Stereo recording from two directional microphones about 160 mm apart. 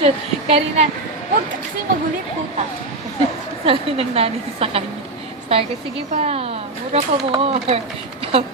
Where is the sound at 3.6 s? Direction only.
35° right (ahead or behind).